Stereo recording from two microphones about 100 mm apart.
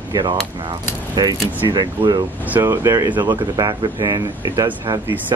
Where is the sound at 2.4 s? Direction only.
20° right (ahead or behind).